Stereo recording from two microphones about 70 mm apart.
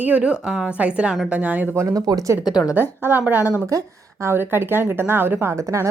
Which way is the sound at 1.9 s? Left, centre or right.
Right.